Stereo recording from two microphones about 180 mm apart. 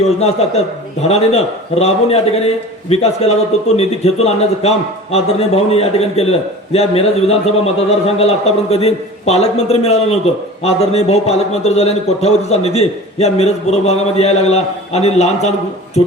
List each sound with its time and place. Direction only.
0.2 s a man's voice: 35° left (ahead or behind)